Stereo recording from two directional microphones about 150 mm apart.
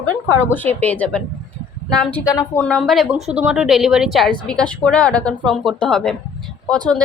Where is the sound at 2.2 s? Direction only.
25° left (ahead or behind).